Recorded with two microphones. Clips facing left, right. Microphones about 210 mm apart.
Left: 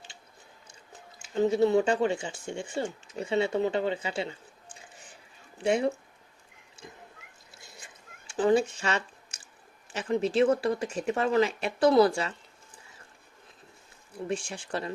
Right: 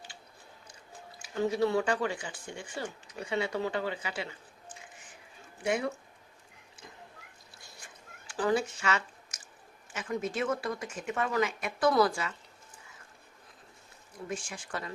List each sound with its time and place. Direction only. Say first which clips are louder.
1.2 s speech: left 5 dB; 25° left (ahead or behind)
8.3 s speech: left 5 dB; 25° left (ahead or behind)
14.4 s speech: left 5 dB; 30° left (ahead or behind)